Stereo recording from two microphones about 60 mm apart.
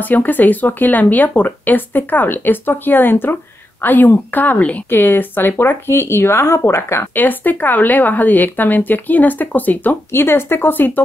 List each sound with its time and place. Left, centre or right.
0.0 s speech: left
4.8 s speech: left
7.2 s speech: left